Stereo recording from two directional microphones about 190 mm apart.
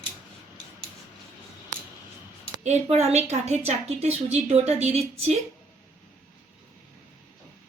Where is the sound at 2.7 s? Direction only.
35° right (ahead or behind).